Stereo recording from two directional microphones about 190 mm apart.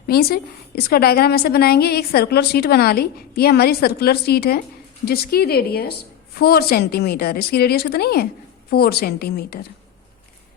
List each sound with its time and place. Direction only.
0.1 s a woman's voice: 55° left (ahead or behind)